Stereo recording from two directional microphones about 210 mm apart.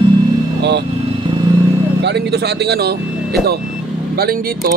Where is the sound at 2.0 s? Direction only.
55° right (ahead or behind).